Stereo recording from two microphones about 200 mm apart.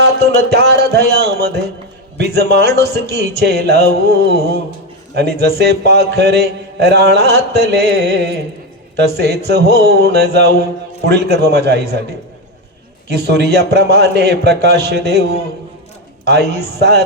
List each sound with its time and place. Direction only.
0.5 s a man's voice: 55° right (ahead or behind)
13.1 s a man's voice: 55° right (ahead or behind)